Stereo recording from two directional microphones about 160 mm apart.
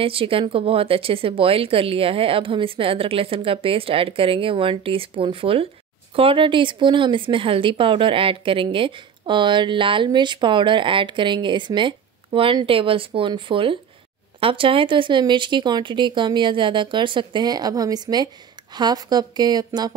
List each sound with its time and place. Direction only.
0.0 s a woman's voice: 35° right (ahead or behind)